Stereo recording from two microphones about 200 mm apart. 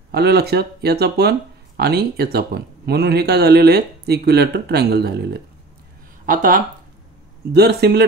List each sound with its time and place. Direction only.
0.1 s speech: 55° right (ahead or behind)
6.2 s speech: 40° right (ahead or behind)
7.5 s speech: 55° right (ahead or behind)